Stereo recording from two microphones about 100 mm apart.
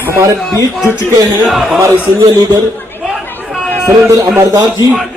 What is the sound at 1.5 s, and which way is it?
Speech, centre (ahead or behind).